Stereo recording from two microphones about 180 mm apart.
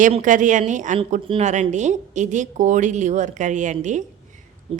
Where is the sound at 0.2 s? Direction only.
45° right (ahead or behind).